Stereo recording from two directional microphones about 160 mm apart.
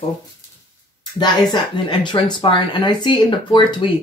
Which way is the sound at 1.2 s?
30° left (ahead or behind).